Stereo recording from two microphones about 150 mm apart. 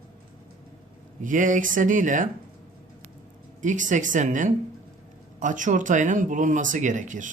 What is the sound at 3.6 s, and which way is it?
Speech, 55° right (ahead or behind).